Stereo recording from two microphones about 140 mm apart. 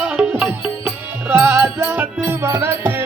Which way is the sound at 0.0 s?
5° right (ahead or behind).